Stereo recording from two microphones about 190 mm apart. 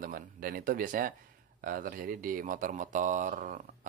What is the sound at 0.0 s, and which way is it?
Speech, 50° right (ahead or behind).